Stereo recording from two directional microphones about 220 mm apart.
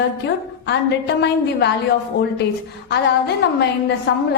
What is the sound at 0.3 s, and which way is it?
A woman's voice, 50° left (ahead or behind).